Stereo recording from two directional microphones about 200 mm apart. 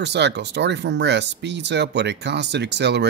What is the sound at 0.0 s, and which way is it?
Speech, 60° right (ahead or behind).